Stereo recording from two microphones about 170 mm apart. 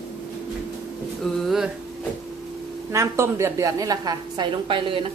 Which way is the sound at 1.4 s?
Centre (ahead or behind).